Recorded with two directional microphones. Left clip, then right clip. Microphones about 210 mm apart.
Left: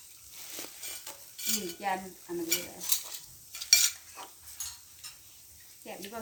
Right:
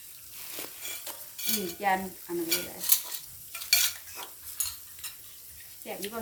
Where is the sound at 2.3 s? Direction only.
Centre (ahead or behind).